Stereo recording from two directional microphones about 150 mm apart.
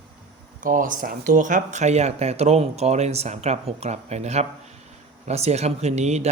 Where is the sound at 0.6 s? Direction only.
65° right (ahead or behind).